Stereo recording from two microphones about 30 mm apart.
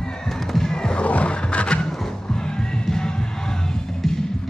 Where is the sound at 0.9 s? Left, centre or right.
Left.